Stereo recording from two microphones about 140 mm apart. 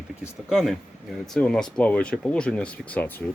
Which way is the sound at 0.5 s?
Centre (ahead or behind).